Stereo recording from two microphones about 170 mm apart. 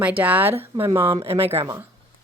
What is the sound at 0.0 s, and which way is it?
Speech, 10° right (ahead or behind).